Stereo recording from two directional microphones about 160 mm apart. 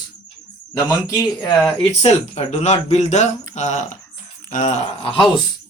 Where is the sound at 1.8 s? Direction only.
40° left (ahead or behind).